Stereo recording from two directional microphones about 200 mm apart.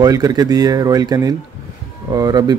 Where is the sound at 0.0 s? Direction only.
20° right (ahead or behind).